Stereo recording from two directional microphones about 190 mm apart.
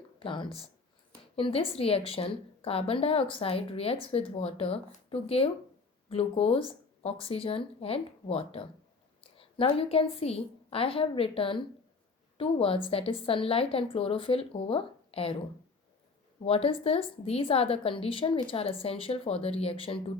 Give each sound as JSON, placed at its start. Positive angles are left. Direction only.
{"t": 0.2, "sound": "a woman's voice", "side_deg": 25}